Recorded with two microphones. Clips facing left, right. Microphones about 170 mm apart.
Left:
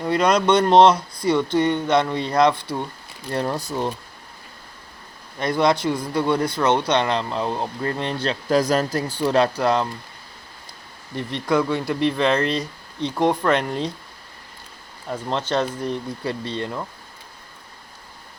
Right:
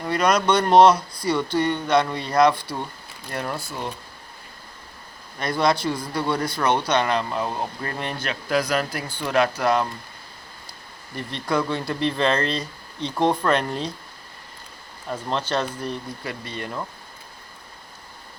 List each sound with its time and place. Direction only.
0.0 s speech: 25° left (ahead or behind)
3.3 s speech: 35° left (ahead or behind)
5.4 s speech: 20° left (ahead or behind)
11.1 s speech: 20° left (ahead or behind)
15.3 s speech: 20° left (ahead or behind)
16.2 s speech: 30° left (ahead or behind)
16.6 s speech: 20° left (ahead or behind)